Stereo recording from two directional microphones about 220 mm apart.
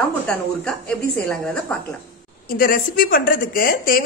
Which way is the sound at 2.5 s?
40° left (ahead or behind).